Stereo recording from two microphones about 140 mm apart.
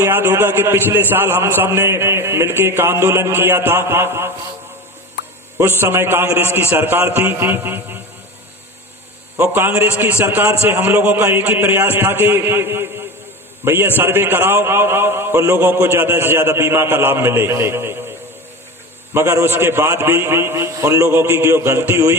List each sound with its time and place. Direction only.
0.0 s a man's voice: 15° right (ahead or behind)
5.8 s a man's voice: 15° right (ahead or behind)
9.4 s a man's voice: 15° right (ahead or behind)
19.1 s a man's voice: 20° right (ahead or behind)